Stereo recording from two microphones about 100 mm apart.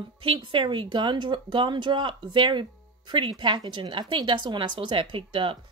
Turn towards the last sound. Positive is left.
turn(degrees=-60)  # may be behind; listen again after turning